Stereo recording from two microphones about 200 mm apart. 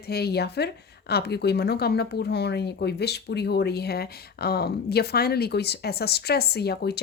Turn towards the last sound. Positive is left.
turn(degrees=55)  # may be behind; listen again after turning